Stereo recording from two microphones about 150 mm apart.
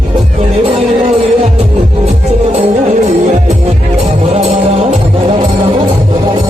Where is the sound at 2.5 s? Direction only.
45° right (ahead or behind).